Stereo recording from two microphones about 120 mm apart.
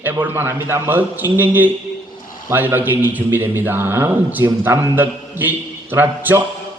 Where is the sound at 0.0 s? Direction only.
15° right (ahead or behind).